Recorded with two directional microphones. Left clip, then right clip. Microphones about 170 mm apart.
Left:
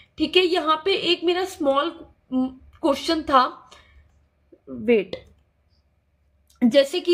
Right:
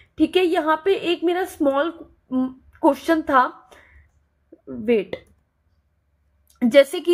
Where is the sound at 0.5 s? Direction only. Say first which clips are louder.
Right 1 dB; 40° right (ahead or behind).